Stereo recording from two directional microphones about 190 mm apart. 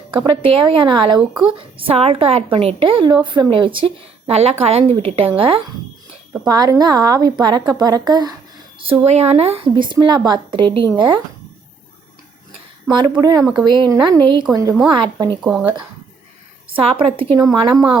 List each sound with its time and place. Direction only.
0.3 s a woman's voice: 25° right (ahead or behind)
1.2 s speech: 5° right (ahead or behind)
1.7 s a woman's voice: 30° right (ahead or behind)
9.0 s a woman's voice: 35° right (ahead or behind)
12.9 s a woman's voice: 25° right (ahead or behind)
15.4 s speech: centre (ahead or behind)
16.7 s a woman's voice: 30° right (ahead or behind)